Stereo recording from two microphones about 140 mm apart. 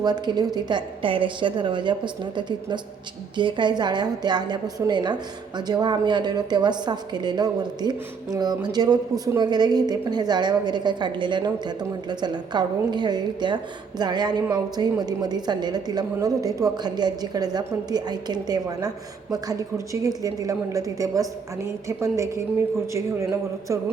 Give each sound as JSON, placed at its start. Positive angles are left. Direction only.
{"t": 0.0, "sound": "a woman's voice", "side_deg": -30}